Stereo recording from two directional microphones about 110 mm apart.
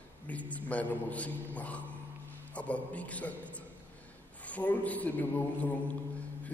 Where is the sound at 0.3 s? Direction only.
15° left (ahead or behind).